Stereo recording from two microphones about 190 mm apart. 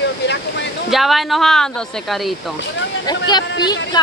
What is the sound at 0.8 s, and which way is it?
Speech, centre (ahead or behind).